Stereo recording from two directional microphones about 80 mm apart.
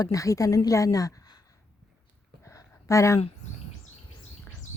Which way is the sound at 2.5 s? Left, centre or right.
Left.